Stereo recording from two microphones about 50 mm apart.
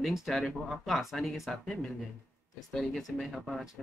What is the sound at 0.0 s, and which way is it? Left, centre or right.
Speech, centre.